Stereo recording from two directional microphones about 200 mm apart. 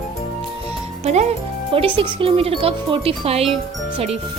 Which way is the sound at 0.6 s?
30° right (ahead or behind).